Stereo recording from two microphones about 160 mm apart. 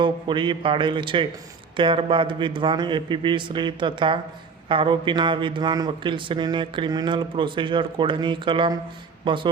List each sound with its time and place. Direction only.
0.0 s speech: 30° right (ahead or behind)